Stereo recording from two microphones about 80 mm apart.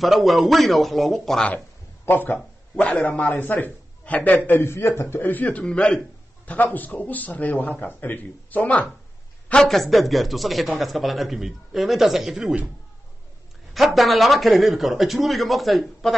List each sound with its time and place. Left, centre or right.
0.0 s a man's voice: centre
2.0 s a man's voice: left
9.5 s a man's voice: centre
13.7 s a man's voice: centre